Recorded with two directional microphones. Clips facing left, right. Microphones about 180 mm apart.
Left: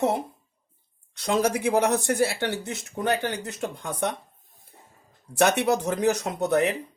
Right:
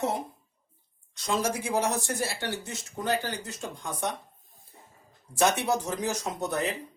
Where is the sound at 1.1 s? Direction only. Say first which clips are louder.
Left 5 dB; 60° left (ahead or behind).